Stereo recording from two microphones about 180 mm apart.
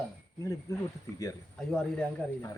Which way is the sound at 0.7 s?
15° left (ahead or behind).